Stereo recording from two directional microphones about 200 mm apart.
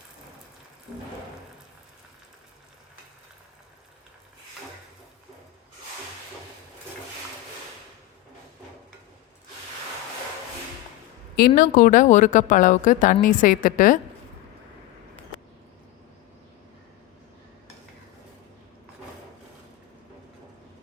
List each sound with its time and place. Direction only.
11.3 s a woman's voice: 45° left (ahead or behind)